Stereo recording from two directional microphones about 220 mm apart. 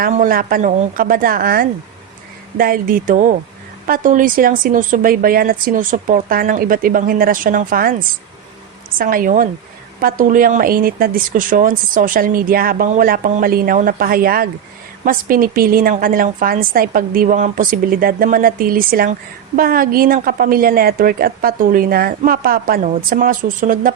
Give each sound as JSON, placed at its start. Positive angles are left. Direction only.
{"t": 0.0, "sound": "speech", "side_deg": -40}